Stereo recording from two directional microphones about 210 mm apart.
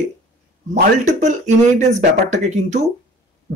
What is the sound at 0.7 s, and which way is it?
Speech, 35° right (ahead or behind).